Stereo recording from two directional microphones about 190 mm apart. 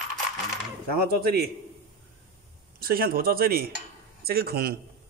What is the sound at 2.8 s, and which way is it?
Speech, 50° right (ahead or behind).